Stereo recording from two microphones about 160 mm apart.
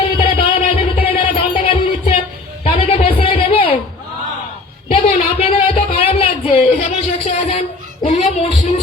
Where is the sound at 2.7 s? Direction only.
35° left (ahead or behind).